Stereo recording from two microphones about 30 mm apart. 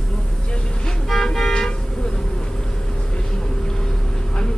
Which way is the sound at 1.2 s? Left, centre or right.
Centre.